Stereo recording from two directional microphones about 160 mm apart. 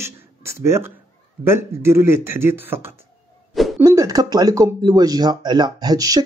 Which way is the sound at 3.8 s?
20° right (ahead or behind).